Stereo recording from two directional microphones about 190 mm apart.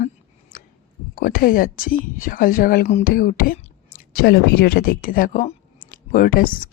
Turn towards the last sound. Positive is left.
turn(degrees=45)  # may be behind; listen again after turning